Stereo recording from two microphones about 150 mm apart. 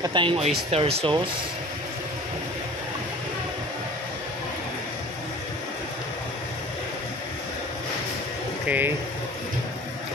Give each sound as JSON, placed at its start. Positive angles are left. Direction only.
{"t": 0.0, "sound": "speech", "side_deg": -35}
{"t": 8.6, "sound": "speech", "side_deg": -10}